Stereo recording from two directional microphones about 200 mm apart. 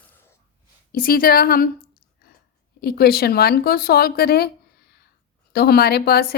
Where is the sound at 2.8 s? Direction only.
50° left (ahead or behind).